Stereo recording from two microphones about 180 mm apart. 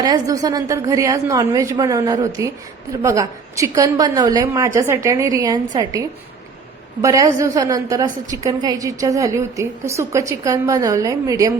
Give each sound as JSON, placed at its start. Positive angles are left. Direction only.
{"t": 0.0, "sound": "a woman's voice", "side_deg": -20}